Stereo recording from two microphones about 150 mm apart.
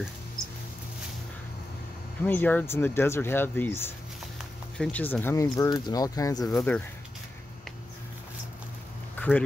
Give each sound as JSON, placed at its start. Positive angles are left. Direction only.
{"t": 2.2, "sound": "speech", "side_deg": 10}
{"t": 9.2, "sound": "quack", "side_deg": 10}